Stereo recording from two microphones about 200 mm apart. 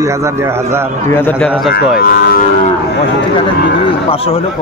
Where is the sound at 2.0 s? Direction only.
50° left (ahead or behind).